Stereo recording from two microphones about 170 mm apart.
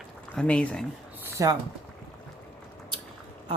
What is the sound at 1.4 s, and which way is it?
Speech, 20° right (ahead or behind).